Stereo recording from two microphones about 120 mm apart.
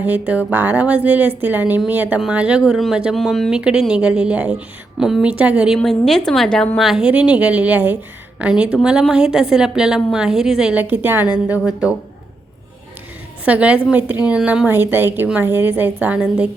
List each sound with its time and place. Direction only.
0.0 s a woman's voice: 15° right (ahead or behind)
10.8 s a woman's voice: 15° right (ahead or behind)
13.4 s a woman's voice: 10° right (ahead or behind)